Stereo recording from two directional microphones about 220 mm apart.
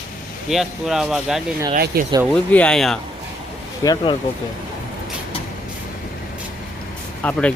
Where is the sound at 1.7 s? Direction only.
40° right (ahead or behind).